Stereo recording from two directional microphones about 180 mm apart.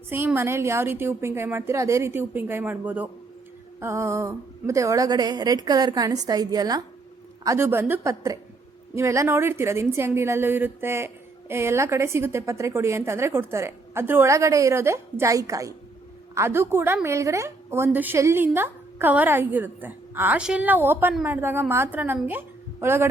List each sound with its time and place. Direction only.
0.1 s a woman's voice: 10° right (ahead or behind)